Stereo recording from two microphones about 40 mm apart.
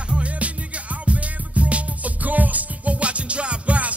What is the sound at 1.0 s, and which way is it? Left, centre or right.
Music, right.